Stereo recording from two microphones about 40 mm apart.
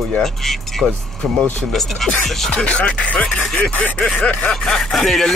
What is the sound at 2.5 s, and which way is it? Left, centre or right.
Speech, left.